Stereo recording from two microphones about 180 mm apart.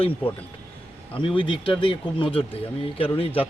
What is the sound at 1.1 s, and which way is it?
Speech, 25° left (ahead or behind).